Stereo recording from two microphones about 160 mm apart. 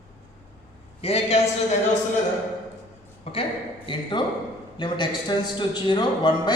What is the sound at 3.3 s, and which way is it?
Speech, 40° left (ahead or behind).